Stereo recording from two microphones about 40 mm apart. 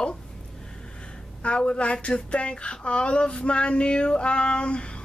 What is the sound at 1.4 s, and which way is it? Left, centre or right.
Speech, left.